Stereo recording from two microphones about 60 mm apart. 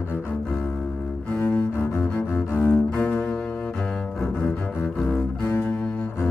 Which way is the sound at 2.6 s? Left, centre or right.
Left.